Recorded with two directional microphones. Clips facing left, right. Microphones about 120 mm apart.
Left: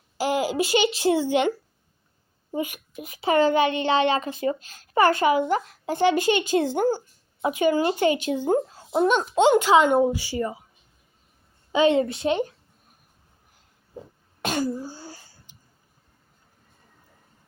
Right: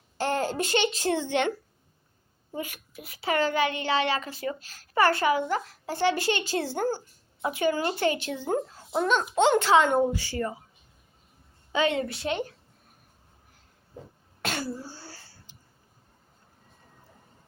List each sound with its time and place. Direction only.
0.2 s a child's voice: 10° left (ahead or behind)
11.7 s a child's voice: 20° left (ahead or behind)
14.4 s throat clearing: 15° left (ahead or behind)